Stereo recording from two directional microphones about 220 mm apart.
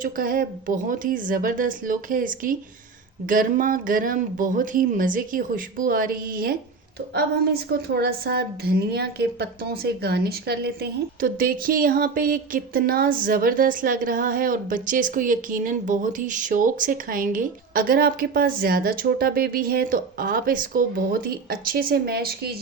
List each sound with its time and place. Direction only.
0.0 s a woman's voice: 40° right (ahead or behind)
7.7 s a woman's voice: 45° right (ahead or behind)